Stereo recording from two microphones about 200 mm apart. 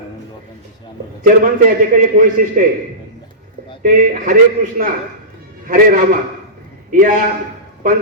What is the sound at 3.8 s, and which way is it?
Speech, 45° right (ahead or behind).